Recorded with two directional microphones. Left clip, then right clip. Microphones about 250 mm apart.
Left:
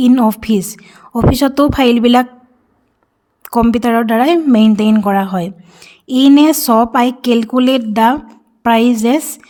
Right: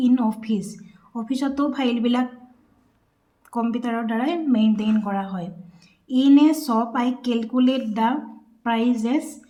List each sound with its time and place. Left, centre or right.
0.0 s speech: left
3.4 s speech: left